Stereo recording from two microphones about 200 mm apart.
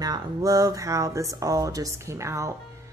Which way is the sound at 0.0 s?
20° right (ahead or behind).